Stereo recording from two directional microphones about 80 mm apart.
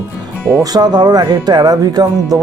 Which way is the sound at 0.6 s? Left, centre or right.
Right.